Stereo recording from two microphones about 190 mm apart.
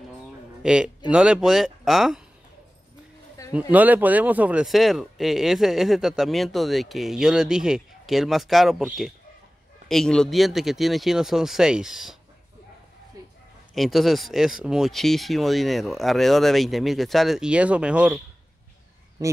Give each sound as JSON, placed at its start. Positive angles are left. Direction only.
{"t": 0.6, "sound": "speech", "side_deg": -5}
{"t": 3.4, "sound": "a sound", "side_deg": 15}
{"t": 3.7, "sound": "speech", "side_deg": -10}
{"t": 13.7, "sound": "speech", "side_deg": 0}